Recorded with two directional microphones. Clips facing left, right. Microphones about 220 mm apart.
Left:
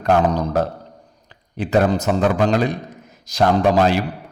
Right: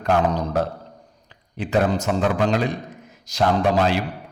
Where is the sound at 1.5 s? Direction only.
40° left (ahead or behind).